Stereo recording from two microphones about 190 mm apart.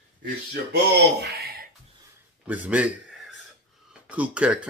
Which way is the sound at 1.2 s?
55° right (ahead or behind).